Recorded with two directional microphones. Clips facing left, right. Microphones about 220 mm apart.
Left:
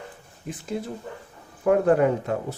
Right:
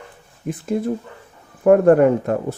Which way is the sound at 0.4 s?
55° right (ahead or behind).